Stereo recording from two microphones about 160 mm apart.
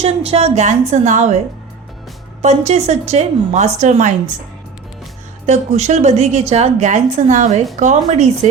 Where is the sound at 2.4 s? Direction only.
45° right (ahead or behind).